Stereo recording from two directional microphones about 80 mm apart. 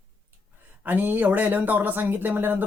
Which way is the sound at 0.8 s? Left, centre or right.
Right.